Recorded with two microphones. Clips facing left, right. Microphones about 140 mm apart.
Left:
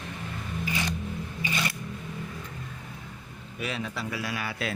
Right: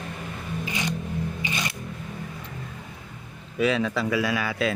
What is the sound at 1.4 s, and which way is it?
Music, 20° right (ahead or behind).